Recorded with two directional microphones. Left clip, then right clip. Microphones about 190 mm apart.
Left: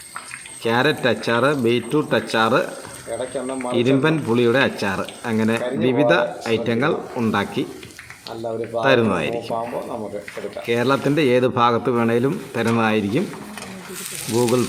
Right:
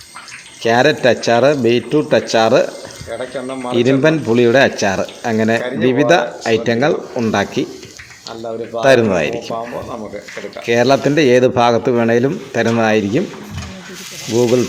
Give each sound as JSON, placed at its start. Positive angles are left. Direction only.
{"t": 0.6, "sound": "speech", "side_deg": -15}
{"t": 3.1, "sound": "speech", "side_deg": 0}
{"t": 3.7, "sound": "speech", "side_deg": -15}
{"t": 8.8, "sound": "speech", "side_deg": -15}
{"t": 10.7, "sound": "speech", "side_deg": -15}
{"t": 14.3, "sound": "speech", "side_deg": 0}